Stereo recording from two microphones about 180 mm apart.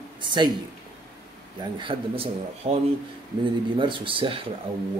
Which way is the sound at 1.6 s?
25° right (ahead or behind).